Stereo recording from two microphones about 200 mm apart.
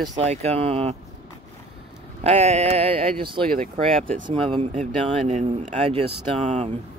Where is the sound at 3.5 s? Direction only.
40° right (ahead or behind).